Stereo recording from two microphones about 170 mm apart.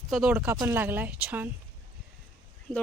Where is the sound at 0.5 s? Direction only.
20° right (ahead or behind).